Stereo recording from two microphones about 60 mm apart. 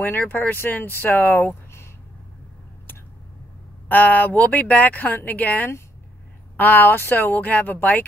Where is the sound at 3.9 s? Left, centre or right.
Left.